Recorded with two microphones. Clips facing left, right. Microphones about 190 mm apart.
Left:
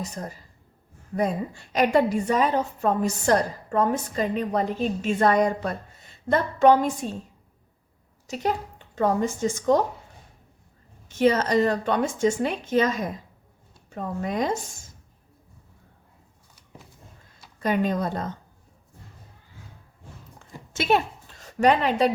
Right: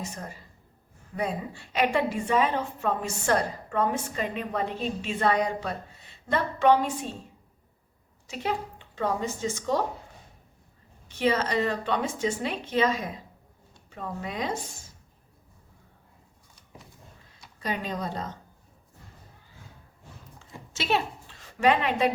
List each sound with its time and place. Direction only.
0.0 s a woman's voice: 35° left (ahead or behind)
8.3 s a woman's voice: 40° left (ahead or behind)
11.1 s a woman's voice: 45° left (ahead or behind)
17.6 s a woman's voice: 55° left (ahead or behind)
20.7 s a woman's voice: 50° left (ahead or behind)